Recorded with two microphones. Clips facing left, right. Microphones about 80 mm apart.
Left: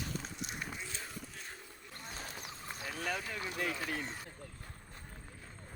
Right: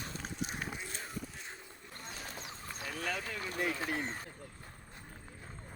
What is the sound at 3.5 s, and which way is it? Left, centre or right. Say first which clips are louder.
Speech: right 3 dB; right.